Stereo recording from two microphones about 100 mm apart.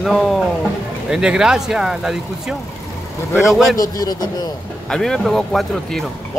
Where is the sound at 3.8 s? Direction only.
40° left (ahead or behind).